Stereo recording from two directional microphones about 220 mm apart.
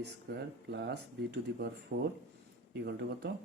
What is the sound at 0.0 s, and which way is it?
Speech, 50° right (ahead or behind).